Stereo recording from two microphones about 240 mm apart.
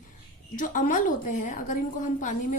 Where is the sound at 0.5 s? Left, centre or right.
Left.